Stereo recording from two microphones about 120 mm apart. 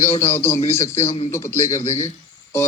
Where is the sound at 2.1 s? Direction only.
20° left (ahead or behind).